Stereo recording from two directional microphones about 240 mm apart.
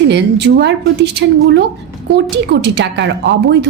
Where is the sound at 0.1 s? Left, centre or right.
Right.